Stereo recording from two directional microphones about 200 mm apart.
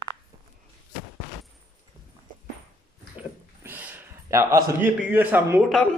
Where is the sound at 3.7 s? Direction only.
10° right (ahead or behind).